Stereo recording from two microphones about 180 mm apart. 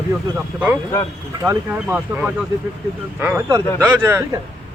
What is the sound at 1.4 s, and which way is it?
A man's voice, 10° right (ahead or behind).